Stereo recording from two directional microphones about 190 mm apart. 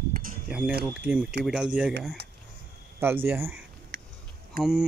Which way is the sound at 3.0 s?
10° right (ahead or behind).